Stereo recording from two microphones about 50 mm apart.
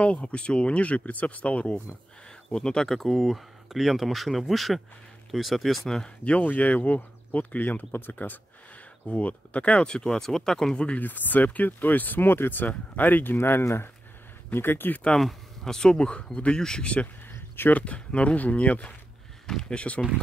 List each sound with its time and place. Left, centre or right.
0.0 s speech: left
2.5 s speech: centre
5.9 s speech: left
6.4 s speech: left
9.0 s speech: left; by 10.8 s centre
11.0 s speech: left
15.1 s speech: centre; by 18.9 s left
19.4 s speech: centre